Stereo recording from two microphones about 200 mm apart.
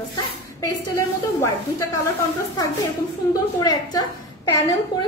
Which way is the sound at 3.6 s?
20° left (ahead or behind).